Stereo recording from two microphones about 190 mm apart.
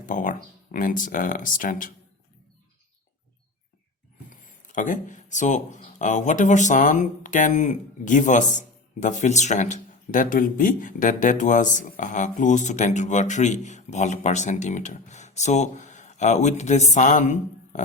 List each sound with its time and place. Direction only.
0.0 s speech: 45° left (ahead or behind)
4.3 s speech: 40° left (ahead or behind)